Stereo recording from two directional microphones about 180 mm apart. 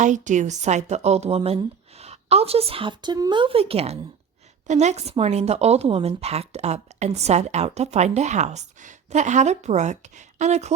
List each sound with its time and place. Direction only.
0.0 s speech: 45° right (ahead or behind)